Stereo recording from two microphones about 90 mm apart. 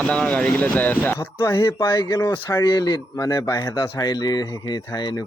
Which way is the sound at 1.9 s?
45° left (ahead or behind).